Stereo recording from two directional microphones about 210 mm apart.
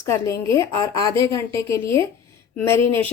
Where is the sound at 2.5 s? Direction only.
10° left (ahead or behind).